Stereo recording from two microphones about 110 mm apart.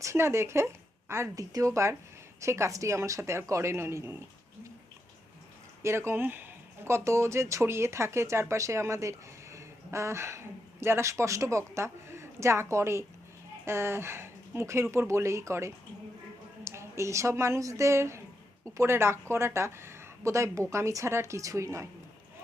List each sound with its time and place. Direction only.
0.0 s speech: 25° right (ahead or behind)
5.8 s a woman's voice: 25° right (ahead or behind)